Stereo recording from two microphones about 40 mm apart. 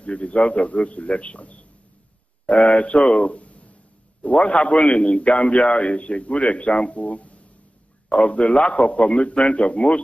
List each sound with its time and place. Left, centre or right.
0.0 s a man's voice: left